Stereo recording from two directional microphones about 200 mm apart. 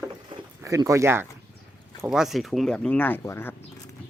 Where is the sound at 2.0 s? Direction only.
5° right (ahead or behind).